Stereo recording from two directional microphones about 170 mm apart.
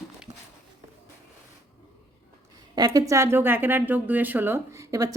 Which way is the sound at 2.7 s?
20° right (ahead or behind).